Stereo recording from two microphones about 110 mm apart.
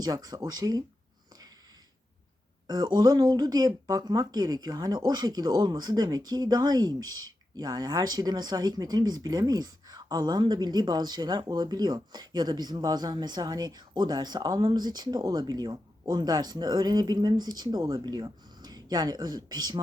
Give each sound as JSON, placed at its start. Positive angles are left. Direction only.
{"t": 0.0, "sound": "speech", "side_deg": -35}
{"t": 2.6, "sound": "speech", "side_deg": -40}